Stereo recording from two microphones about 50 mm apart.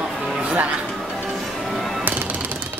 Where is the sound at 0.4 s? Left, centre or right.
Right.